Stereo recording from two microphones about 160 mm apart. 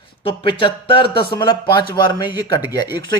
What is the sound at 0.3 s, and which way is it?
A man's voice, 30° left (ahead or behind).